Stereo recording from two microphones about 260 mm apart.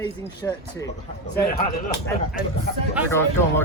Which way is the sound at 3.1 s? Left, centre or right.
Centre.